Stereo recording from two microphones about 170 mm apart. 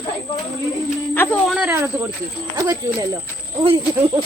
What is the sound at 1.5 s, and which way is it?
Speech, 10° right (ahead or behind).